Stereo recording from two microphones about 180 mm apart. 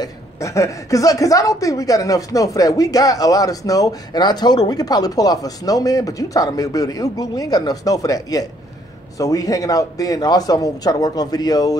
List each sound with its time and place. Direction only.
0.0 s a woman's voice: 15° left (ahead or behind)